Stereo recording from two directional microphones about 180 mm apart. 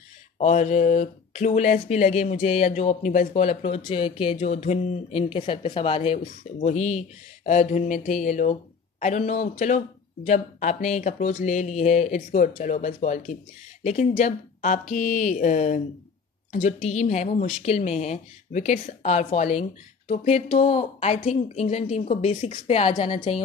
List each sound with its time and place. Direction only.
0.4 s speech: 40° left (ahead or behind)